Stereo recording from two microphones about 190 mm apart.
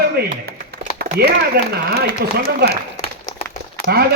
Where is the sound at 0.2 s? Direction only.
55° right (ahead or behind).